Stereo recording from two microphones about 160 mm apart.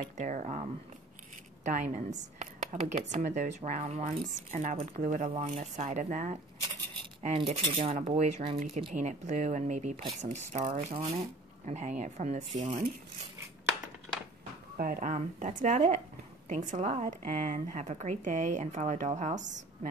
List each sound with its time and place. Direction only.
0.2 s a woman's voice: 50° right (ahead or behind)
7.3 s a woman's voice: 40° right (ahead or behind)
14.8 s a woman's voice: 60° right (ahead or behind)